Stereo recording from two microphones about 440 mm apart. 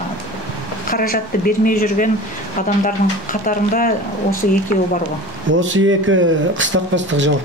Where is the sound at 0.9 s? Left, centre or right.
Centre.